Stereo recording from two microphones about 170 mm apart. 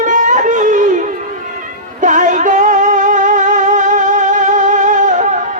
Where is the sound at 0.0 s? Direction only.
50° right (ahead or behind).